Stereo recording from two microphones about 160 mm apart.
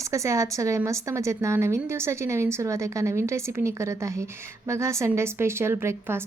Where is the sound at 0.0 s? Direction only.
20° right (ahead or behind).